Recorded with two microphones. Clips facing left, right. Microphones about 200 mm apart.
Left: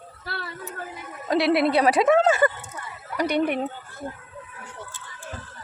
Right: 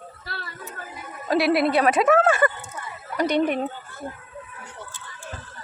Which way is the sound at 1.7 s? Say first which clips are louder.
Even; 25° left (ahead or behind).